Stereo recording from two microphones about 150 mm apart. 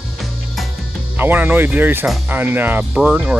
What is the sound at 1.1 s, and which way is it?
Speech, 15° right (ahead or behind).